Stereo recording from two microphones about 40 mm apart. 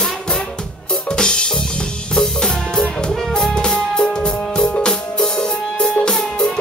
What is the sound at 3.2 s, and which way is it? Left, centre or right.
Music, centre.